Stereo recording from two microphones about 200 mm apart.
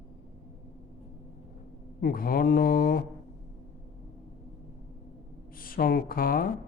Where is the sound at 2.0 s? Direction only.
45° left (ahead or behind).